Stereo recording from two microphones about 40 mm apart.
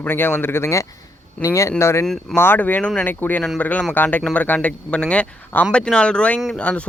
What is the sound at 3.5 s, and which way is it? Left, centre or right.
Speech, left.